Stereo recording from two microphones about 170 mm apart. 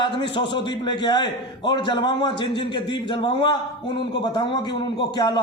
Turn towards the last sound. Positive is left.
turn(degrees=25)  # may be behind; listen again after turning